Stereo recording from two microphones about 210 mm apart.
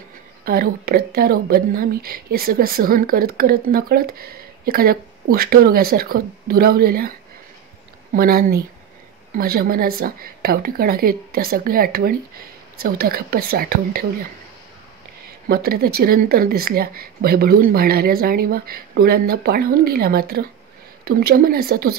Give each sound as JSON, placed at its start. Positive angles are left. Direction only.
{"t": 0.5, "sound": "a woman's voice", "side_deg": -45}
{"t": 8.1, "sound": "a woman's voice", "side_deg": -45}
{"t": 15.4, "sound": "a woman's voice", "side_deg": -45}